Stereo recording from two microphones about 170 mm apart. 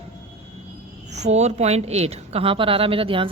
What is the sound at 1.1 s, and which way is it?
A woman's voice, 40° right (ahead or behind).